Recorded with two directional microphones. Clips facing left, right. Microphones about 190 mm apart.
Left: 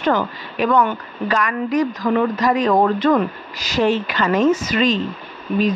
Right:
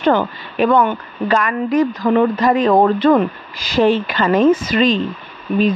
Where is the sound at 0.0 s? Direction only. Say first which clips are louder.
Right 4 dB; 30° right (ahead or behind).